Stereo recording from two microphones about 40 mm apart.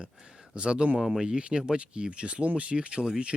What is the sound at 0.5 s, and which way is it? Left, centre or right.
Speech, right.